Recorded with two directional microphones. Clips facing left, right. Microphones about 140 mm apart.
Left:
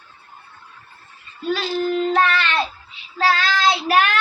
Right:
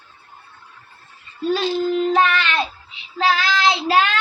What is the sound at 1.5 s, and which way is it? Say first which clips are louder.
Child singing: right 1 dB; 15° right (ahead or behind).